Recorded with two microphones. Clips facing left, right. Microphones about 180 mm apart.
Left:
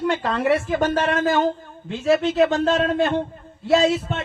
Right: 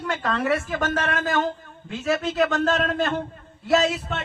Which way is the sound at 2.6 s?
15° left (ahead or behind).